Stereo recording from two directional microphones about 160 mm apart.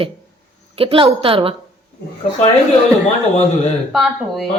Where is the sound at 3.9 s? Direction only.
Centre (ahead or behind).